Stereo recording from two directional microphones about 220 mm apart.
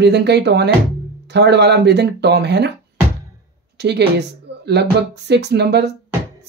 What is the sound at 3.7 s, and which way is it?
Speech, 50° right (ahead or behind).